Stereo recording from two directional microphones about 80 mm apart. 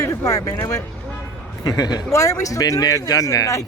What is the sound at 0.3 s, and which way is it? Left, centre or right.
Speech, left.